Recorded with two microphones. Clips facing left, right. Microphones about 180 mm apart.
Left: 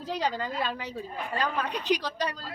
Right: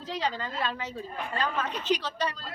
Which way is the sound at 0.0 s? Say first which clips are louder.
Left 2 dB; 10° left (ahead or behind).